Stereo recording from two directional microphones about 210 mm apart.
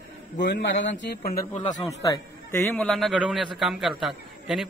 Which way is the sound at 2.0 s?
15° left (ahead or behind).